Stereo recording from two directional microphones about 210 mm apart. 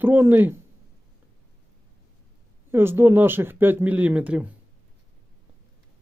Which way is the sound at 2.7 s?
10° right (ahead or behind).